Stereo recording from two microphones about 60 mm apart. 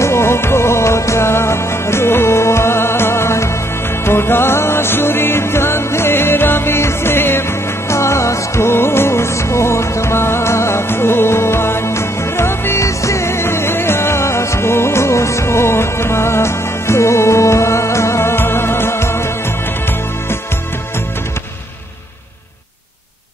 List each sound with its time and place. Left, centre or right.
0.0 s music: left
12.8 s music: left